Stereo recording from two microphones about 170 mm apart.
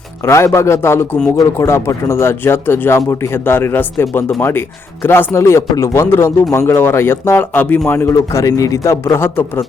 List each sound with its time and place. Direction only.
0.3 s a man's voice: 15° left (ahead or behind)